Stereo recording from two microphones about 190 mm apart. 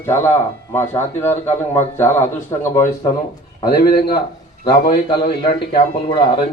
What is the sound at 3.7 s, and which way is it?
Speech, 50° left (ahead or behind).